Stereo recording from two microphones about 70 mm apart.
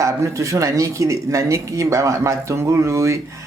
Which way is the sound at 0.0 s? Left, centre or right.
Right.